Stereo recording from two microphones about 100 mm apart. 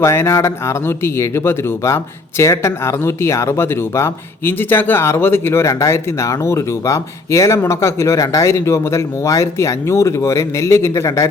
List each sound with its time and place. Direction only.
0.0 s speech: 30° left (ahead or behind)